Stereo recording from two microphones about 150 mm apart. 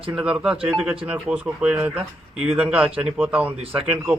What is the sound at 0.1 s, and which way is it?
A man's voice, 5° right (ahead or behind).